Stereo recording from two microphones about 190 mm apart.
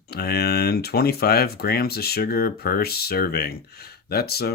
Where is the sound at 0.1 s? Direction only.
55° left (ahead or behind).